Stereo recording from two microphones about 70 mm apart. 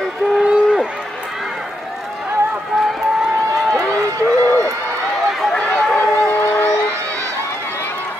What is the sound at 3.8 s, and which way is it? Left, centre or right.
Run, right.